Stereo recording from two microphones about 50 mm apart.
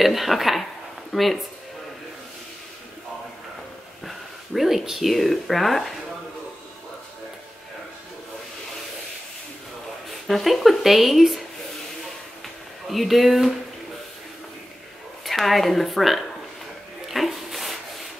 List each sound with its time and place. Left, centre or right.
0.0 s speech: centre
4.6 s speech: centre
10.2 s speech: centre
12.8 s speech: centre
15.2 s speech: centre
17.1 s a sound: centre